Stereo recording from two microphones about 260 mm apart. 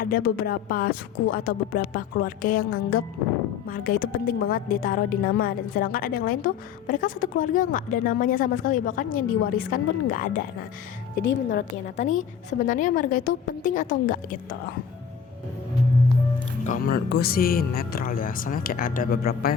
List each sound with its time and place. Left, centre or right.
0.0 s a woman's voice: left
11.3 s speech: left
12.1 s a woman's voice: left
16.6 s a woman's voice: left